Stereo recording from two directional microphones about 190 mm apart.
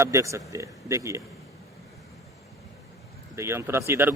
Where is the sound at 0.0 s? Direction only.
15° right (ahead or behind).